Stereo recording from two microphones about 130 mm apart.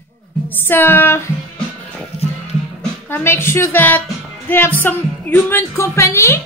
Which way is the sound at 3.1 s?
20° left (ahead or behind).